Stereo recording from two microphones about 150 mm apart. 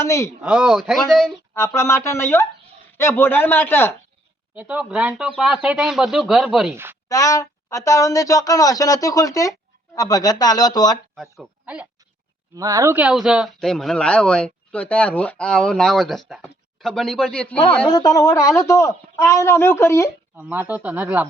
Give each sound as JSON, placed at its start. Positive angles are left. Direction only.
{"t": 0.0, "sound": "speech", "side_deg": 20}
{"t": 0.4, "sound": "speech", "side_deg": -5}
{"t": 1.5, "sound": "speech", "side_deg": 15}
{"t": 4.5, "sound": "speech", "side_deg": -10}
{"t": 7.1, "sound": "speech", "side_deg": 20}
{"t": 11.1, "sound": "speech", "side_deg": 0}
{"t": 12.5, "sound": "speech", "side_deg": -25}
{"t": 13.0, "sound": "speech", "side_deg": -5}
{"t": 17.8, "sound": "speech", "side_deg": 25}
{"t": 20.3, "sound": "speech", "side_deg": -15}